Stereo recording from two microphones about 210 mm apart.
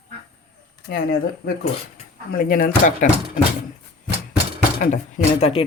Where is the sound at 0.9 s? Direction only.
45° left (ahead or behind).